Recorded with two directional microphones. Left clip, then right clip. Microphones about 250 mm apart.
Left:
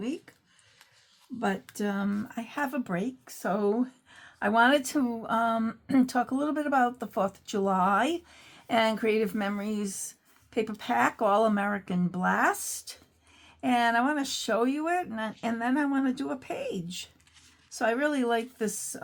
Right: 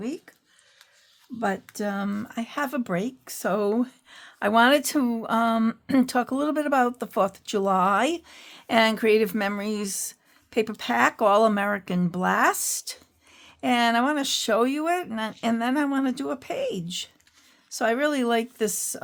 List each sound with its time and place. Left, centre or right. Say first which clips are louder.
1.7 s speech: right 3 dB; right